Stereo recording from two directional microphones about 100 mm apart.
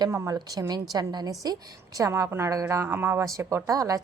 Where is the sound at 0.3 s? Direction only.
40° right (ahead or behind).